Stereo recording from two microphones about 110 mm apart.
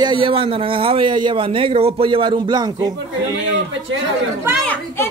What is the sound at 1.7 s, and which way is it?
A man's voice, 65° right (ahead or behind).